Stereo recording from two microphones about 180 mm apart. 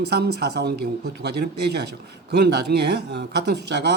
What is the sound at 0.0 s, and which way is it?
Speech, 65° right (ahead or behind).